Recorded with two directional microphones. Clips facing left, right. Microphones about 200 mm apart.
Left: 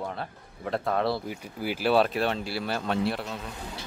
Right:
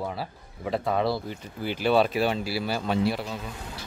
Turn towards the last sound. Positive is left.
turn(degrees=0)  # may be behind; listen again after turning